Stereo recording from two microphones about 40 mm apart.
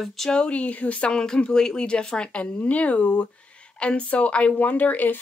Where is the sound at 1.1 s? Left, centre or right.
Left.